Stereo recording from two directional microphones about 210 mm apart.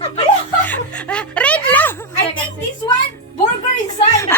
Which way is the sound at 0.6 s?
5° left (ahead or behind).